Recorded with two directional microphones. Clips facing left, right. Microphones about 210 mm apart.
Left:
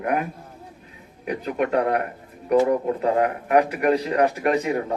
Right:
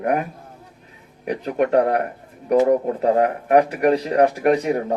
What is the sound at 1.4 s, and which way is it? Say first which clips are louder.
Speech: right 4 dB; 35° right (ahead or behind).